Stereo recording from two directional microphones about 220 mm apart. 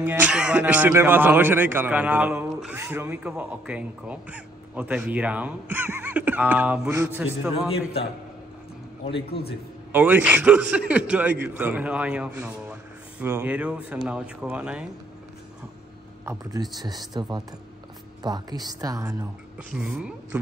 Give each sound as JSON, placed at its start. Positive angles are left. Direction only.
{"t": 0.0, "sound": "speech", "side_deg": -5}
{"t": 9.0, "sound": "a man's voice", "side_deg": 25}
{"t": 9.9, "sound": "a man's voice", "side_deg": -5}
{"t": 16.3, "sound": "speech", "side_deg": -15}
{"t": 19.7, "sound": "a man's voice", "side_deg": -5}